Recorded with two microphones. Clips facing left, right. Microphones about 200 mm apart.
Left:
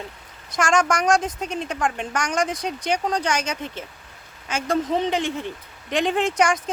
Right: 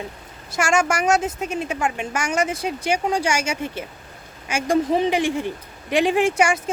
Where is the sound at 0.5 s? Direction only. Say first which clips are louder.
Even; 10° right (ahead or behind).